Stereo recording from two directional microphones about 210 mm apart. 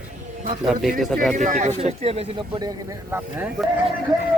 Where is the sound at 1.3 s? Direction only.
35° right (ahead or behind); by 3.5 s 15° right (ahead or behind).